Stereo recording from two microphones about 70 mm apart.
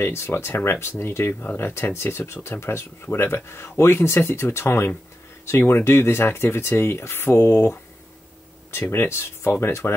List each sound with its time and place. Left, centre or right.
0.0 s speech: left